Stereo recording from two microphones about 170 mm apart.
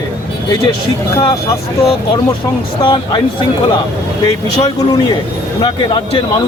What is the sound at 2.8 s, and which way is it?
Speech, 30° left (ahead or behind).